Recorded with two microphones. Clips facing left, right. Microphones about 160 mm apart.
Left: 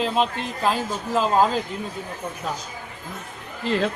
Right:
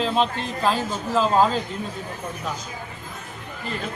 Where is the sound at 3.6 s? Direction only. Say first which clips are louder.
Left 9 dB; 90° left.